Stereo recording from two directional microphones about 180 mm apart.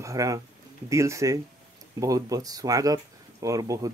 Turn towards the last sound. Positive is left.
turn(degrees=-20)  # may be behind; listen again after turning